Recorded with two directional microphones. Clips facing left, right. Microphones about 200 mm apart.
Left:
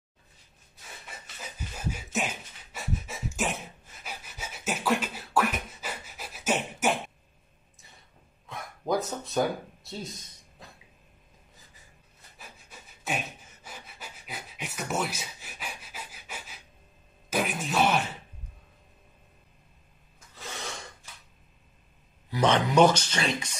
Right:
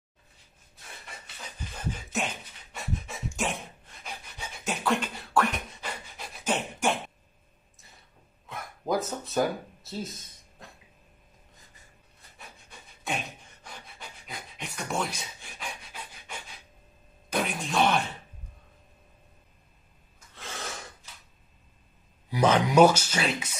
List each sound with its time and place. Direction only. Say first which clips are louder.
1.8 s a sound: even; 10° left (ahead or behind)
8.5 s bow-wow: even; centre (ahead or behind)
12.4 s pant: even; 5° left (ahead or behind)
17.3 s a sound: left 1 dB; 5° left (ahead or behind)
20.3 s gasp: even; centre (ahead or behind)
22.3 s speech: right 1 dB; 10° right (ahead or behind)